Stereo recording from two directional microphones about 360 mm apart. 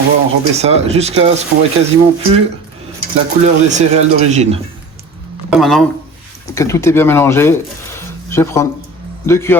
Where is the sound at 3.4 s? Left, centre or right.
Centre.